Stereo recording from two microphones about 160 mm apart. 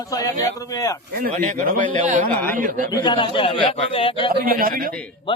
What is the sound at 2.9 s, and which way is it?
Speech, 30° left (ahead or behind).